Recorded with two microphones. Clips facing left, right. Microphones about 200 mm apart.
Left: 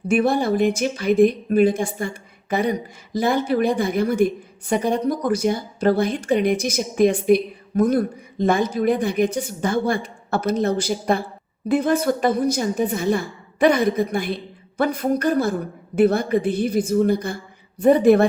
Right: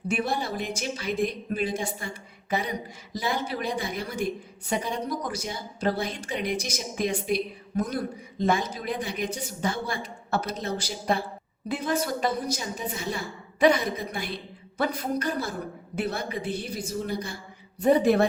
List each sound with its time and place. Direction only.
0.1 s a woman's voice: 55° left (ahead or behind)